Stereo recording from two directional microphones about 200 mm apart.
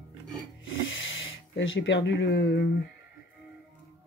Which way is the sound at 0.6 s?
70° left (ahead or behind).